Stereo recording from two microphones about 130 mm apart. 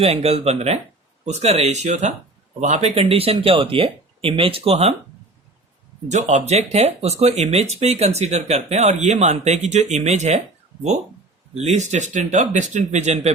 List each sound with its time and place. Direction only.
0.0 s speech: 50° right (ahead or behind)
6.1 s speech: 60° right (ahead or behind)
11.5 s speech: 60° right (ahead or behind)